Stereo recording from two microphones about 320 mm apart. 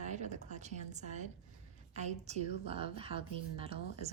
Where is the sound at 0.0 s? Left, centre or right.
Right.